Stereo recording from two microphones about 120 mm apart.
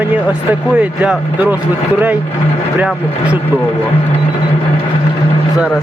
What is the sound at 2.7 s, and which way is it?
Speech, 15° right (ahead or behind).